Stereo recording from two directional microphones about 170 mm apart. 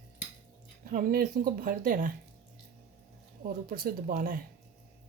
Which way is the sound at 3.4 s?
60° right (ahead or behind).